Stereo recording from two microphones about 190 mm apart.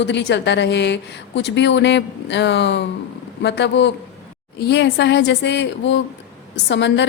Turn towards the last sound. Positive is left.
turn(degrees=70)  # may be behind; listen again after turning